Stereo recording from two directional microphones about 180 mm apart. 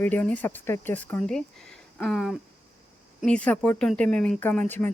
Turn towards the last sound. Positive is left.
turn(degrees=10)  # may be behind; listen again after turning